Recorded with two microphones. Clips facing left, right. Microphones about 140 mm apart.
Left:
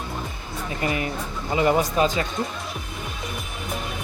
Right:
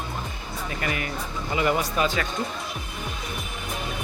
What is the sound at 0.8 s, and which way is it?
Speech, 25° left (ahead or behind).